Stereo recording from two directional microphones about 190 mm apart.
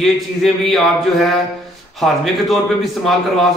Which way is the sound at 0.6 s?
Centre (ahead or behind).